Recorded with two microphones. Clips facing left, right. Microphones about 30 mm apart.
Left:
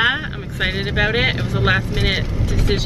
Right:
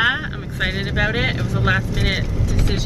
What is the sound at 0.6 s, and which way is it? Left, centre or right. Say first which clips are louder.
Speech: left 2 dB; centre.